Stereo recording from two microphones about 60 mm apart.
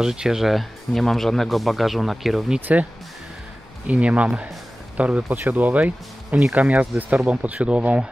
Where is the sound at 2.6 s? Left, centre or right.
Right.